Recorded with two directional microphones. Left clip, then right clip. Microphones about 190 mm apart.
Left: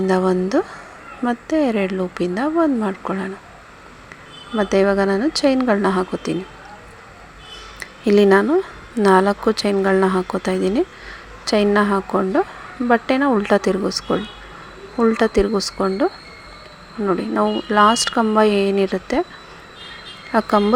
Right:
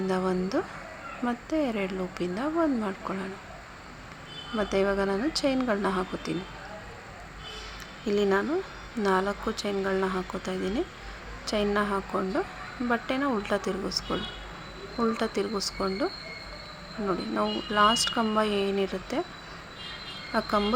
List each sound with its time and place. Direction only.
0.1 s speech: 30° left (ahead or behind)
4.5 s speech: 30° left (ahead or behind)
7.8 s a sound: 35° left (ahead or behind)
9.0 s speech: 35° left (ahead or behind)
17.1 s speech: 25° left (ahead or behind)
20.3 s speech: 30° left (ahead or behind)